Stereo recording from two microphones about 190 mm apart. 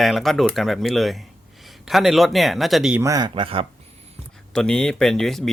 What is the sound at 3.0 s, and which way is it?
Speech, 20° right (ahead or behind).